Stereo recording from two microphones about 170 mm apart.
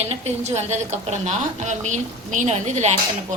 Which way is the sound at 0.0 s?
40° right (ahead or behind).